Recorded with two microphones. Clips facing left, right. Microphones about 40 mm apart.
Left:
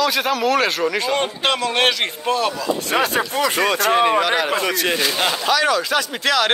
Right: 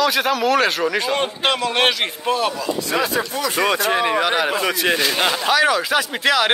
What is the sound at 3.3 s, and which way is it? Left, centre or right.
Speech, centre.